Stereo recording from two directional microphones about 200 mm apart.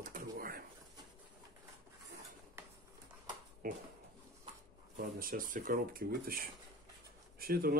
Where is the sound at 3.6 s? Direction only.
45° right (ahead or behind).